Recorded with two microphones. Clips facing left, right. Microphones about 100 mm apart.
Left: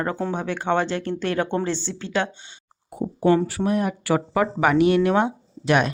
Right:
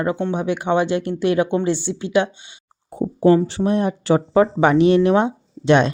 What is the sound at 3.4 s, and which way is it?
Speech, 25° right (ahead or behind).